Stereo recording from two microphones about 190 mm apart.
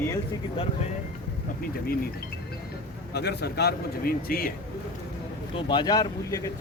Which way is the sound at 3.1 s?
60° left (ahead or behind).